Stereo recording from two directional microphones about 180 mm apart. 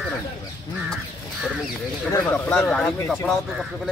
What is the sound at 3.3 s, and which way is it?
Speech, centre (ahead or behind).